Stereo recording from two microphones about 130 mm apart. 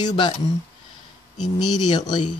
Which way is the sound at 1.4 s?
30° left (ahead or behind).